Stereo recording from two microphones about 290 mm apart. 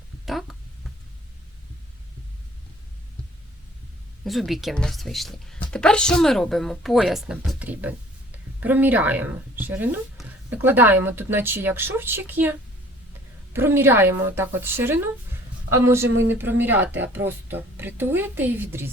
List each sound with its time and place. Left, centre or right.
0.3 s speech: centre
4.3 s a woman's voice: centre
16.0 s speech: right
16.4 s a woman's voice: centre